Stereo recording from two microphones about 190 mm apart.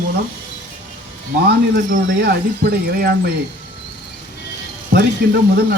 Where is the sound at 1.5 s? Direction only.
55° right (ahead or behind).